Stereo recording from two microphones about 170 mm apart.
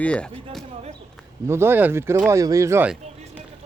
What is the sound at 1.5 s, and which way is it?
Speech, 15° right (ahead or behind).